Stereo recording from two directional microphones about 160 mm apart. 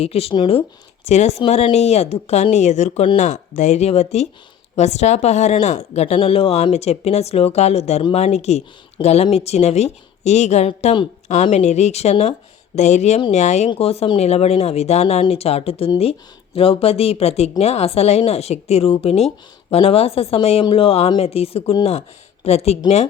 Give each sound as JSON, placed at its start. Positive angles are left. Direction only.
{"t": 0.0, "sound": "speech", "side_deg": 40}